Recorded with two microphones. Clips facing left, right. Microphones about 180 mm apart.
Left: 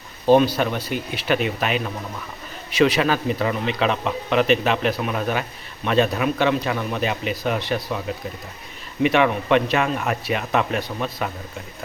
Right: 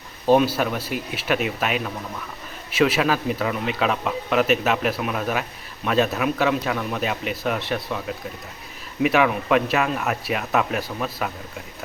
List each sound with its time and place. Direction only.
0.3 s speech: 5° right (ahead or behind)